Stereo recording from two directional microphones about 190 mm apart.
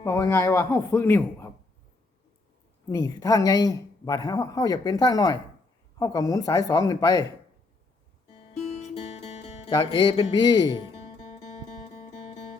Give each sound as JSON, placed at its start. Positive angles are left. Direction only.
{"t": 0.0, "sound": "a man's voice", "side_deg": 15}
{"t": 2.9, "sound": "speech", "side_deg": 20}
{"t": 9.1, "sound": "music", "side_deg": 35}
{"t": 9.6, "sound": "speech", "side_deg": 20}